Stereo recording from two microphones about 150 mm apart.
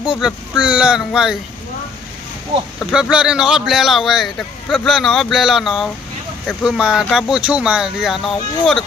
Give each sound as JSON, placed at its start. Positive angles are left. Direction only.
{"t": 0.0, "sound": "speech", "side_deg": -5}
{"t": 2.9, "sound": "speech", "side_deg": -5}